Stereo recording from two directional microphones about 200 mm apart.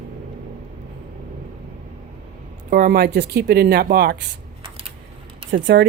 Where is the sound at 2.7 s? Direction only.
50° right (ahead or behind).